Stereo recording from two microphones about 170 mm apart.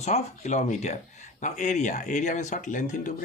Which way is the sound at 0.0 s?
40° left (ahead or behind).